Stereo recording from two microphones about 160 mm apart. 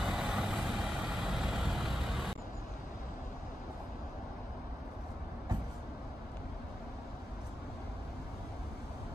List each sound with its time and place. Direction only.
0.0 s vehicle: 5° right (ahead or behind)